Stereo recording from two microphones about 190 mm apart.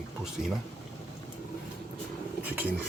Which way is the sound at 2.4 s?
10° right (ahead or behind).